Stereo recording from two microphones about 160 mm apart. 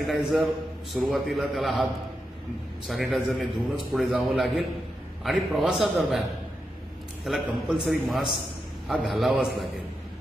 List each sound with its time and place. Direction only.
0.0 s a man's voice: centre (ahead or behind)
2.9 s a man's voice: centre (ahead or behind)
7.2 s a man's voice: 5° right (ahead or behind)